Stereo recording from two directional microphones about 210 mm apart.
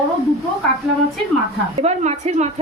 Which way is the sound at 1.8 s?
30° right (ahead or behind).